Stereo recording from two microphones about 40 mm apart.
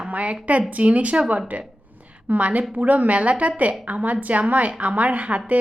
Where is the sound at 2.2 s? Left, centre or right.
Right.